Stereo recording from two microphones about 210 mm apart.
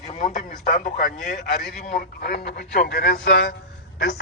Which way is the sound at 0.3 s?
40° left (ahead or behind).